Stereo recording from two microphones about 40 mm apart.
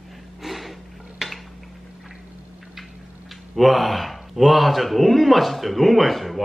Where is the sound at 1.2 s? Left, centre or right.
Centre.